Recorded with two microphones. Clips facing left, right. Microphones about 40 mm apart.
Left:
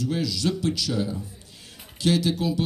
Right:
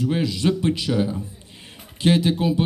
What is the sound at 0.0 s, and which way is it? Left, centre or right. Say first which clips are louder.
A man's voice: right 4 dB; right.